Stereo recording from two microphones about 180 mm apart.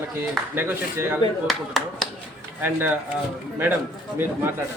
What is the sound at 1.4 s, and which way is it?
Speech, centre (ahead or behind).